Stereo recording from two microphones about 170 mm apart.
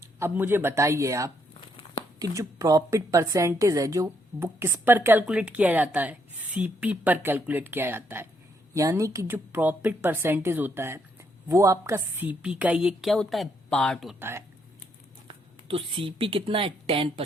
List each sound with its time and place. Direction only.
0.0 s a woman's voice: 15° right (ahead or behind)
14.2 s a woman's voice: 15° right (ahead or behind)
15.3 s speech: 30° right (ahead or behind)